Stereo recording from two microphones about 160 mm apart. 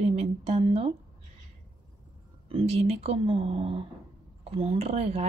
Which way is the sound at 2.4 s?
40° right (ahead or behind).